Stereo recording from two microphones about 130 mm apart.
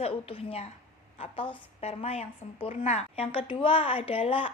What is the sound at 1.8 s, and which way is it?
A woman's voice, 55° left (ahead or behind).